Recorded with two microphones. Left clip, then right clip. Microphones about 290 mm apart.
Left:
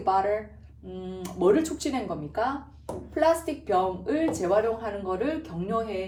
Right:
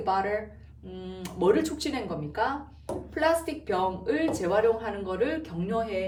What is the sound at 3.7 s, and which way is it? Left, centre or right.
Speech, centre.